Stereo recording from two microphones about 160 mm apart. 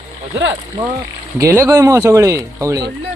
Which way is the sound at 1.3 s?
20° right (ahead or behind).